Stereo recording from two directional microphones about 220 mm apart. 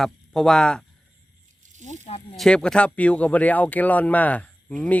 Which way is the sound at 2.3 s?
5° left (ahead or behind).